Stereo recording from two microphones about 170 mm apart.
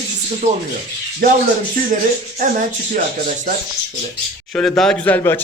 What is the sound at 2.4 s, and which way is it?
Speech, 50° right (ahead or behind).